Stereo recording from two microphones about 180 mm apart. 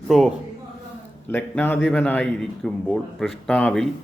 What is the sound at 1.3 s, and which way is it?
Speech, 10° left (ahead or behind).